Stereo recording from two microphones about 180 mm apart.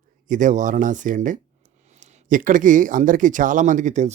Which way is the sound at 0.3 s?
45° right (ahead or behind).